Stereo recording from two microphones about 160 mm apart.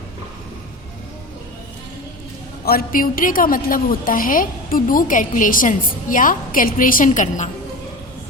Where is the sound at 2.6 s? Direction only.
70° left (ahead or behind); by 7.5 s 50° left (ahead or behind).